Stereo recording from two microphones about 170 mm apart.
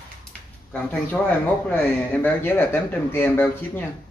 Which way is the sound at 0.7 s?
10° left (ahead or behind).